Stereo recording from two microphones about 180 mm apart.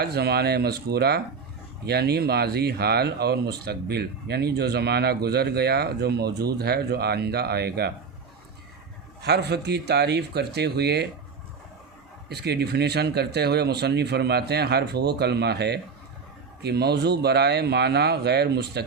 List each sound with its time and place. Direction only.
0.0 s speech: 60° right (ahead or behind)
9.2 s speech: 65° right (ahead or behind)
12.3 s speech: 65° right (ahead or behind)